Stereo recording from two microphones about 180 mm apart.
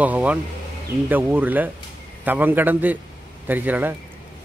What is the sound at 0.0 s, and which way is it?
Speech, 10° right (ahead or behind).